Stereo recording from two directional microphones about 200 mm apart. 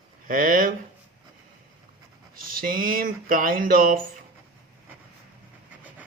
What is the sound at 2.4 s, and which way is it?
Speech, 45° right (ahead or behind).